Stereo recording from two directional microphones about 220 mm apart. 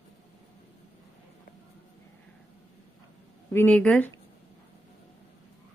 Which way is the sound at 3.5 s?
5° left (ahead or behind).